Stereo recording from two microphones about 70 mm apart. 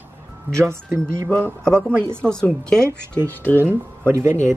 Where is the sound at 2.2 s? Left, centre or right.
Centre.